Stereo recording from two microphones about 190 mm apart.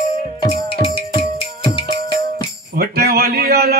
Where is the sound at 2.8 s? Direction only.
55° right (ahead or behind).